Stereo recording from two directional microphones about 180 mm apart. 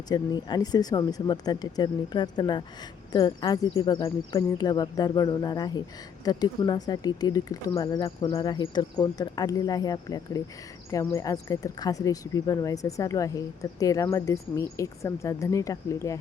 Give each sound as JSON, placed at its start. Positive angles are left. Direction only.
{"t": 0.1, "sound": "speech", "side_deg": 25}